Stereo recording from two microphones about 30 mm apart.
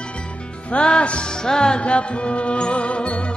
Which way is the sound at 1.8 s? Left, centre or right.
Left.